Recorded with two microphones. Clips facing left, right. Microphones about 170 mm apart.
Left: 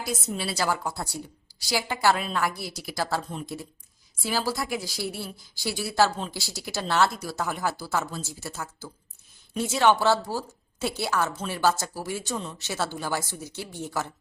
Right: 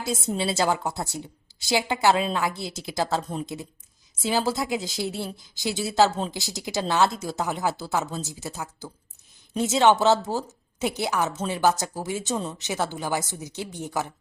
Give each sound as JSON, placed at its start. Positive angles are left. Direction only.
{"t": 0.0, "sound": "a woman's voice", "side_deg": -25}